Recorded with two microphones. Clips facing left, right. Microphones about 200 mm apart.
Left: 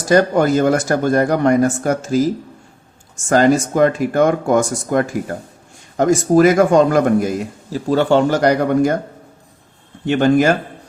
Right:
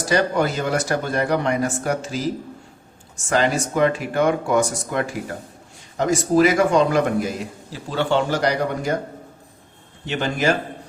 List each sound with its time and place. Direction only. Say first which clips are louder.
0.1 s a man's voice: left 7 dB; 45° left (ahead or behind)
3.2 s a man's voice: left 7 dB; 45° left (ahead or behind)
10.1 s a man's voice: left 9 dB; 50° left (ahead or behind)